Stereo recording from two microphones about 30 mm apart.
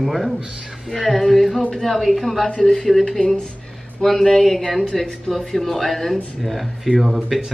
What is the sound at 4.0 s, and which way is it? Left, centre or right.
Speech, centre.